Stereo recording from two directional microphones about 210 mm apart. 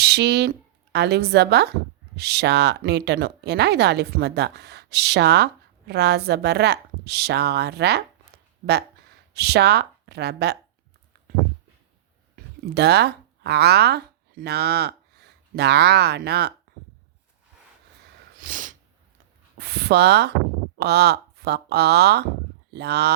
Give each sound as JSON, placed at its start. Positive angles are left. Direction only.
{"t": 0.0, "sound": "speech", "side_deg": -50}
{"t": 12.6, "sound": "speech", "side_deg": -50}
{"t": 18.3, "sound": "sneeze", "side_deg": -40}
{"t": 19.5, "sound": "speech", "side_deg": -50}